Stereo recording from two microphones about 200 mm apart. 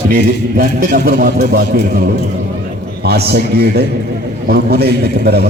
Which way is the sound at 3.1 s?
50° right (ahead or behind).